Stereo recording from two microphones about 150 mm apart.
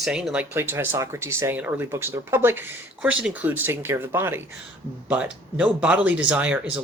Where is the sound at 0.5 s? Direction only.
15° right (ahead or behind).